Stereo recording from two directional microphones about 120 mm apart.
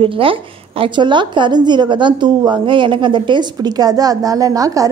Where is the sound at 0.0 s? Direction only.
45° right (ahead or behind).